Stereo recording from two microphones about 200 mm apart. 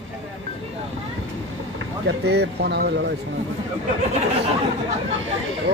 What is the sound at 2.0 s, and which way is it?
Speech, 55° right (ahead or behind).